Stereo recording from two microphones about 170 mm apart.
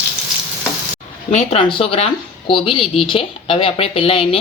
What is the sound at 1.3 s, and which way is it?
Speech, 35° left (ahead or behind).